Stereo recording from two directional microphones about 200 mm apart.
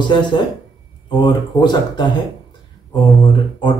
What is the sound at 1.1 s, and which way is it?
Speech, 20° left (ahead or behind).